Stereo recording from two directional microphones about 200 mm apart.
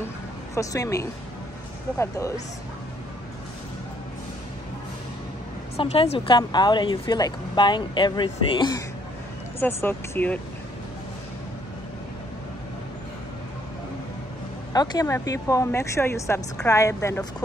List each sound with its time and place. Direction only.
0.6 s speech: 15° left (ahead or behind)
5.8 s speech: 30° left (ahead or behind); by 10.4 s 10° left (ahead or behind)
14.7 s speech: 20° left (ahead or behind)